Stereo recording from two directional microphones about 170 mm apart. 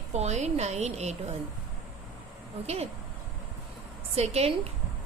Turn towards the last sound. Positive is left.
turn(degrees=-35)  # may be behind; listen again after turning